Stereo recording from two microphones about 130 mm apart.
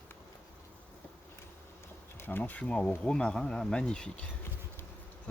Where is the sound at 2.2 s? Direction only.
15° left (ahead or behind).